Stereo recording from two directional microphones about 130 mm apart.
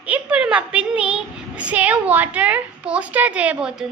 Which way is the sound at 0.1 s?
10° right (ahead or behind).